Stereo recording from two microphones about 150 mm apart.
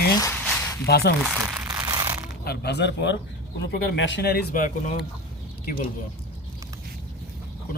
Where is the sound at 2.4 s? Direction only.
90° left.